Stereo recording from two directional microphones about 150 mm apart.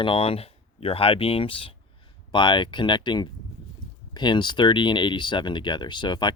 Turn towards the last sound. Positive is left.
turn(degrees=30)  # may be behind; listen again after turning